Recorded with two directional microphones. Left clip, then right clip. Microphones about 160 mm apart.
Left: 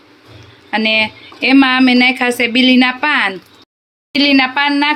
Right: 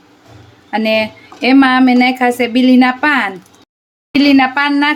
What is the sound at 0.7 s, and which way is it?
Speech, 15° right (ahead or behind).